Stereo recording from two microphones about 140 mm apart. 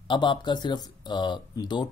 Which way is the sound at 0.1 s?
30° left (ahead or behind).